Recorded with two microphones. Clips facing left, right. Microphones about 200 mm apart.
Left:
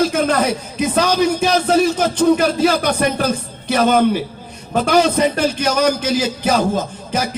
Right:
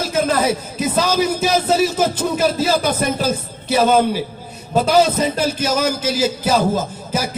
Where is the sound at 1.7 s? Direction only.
5° right (ahead or behind).